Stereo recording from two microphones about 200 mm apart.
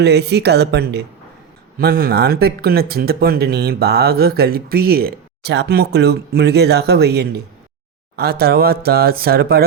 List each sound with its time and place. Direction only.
0.0 s a woman's voice: 55° right (ahead or behind)